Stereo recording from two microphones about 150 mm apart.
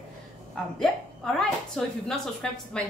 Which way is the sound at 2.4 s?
5° left (ahead or behind).